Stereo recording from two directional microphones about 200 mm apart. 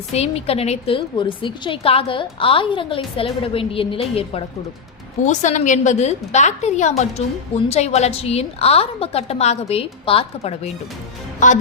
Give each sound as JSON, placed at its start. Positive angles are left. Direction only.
{"t": 0.1, "sound": "a woman's voice", "side_deg": 30}